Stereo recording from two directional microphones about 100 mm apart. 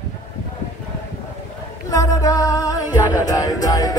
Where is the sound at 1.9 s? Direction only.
35° left (ahead or behind).